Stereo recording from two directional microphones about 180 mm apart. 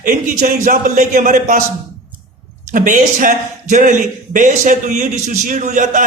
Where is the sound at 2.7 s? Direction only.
45° right (ahead or behind).